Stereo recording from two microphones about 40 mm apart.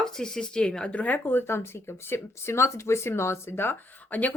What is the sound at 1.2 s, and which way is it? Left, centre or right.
Speech, left.